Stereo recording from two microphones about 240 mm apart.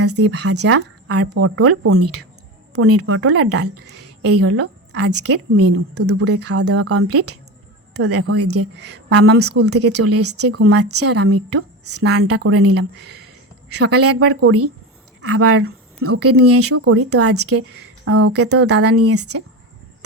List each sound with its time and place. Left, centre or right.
0.0 s speech: right
3.2 s speech: right
8.7 s a woman's voice: right
9.4 s speech: right
13.7 s speech: right
17.7 s speech: right